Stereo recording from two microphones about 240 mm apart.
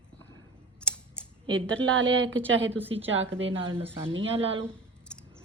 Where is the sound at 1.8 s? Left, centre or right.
Right.